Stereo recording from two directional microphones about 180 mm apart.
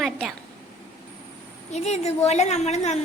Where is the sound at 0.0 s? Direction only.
Centre (ahead or behind).